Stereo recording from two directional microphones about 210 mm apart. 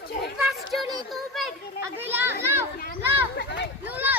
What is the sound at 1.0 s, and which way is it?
Children playing, centre (ahead or behind).